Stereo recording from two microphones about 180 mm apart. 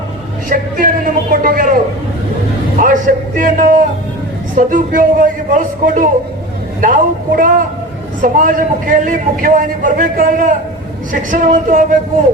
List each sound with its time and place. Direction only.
0.5 s a man's voice: 50° right (ahead or behind)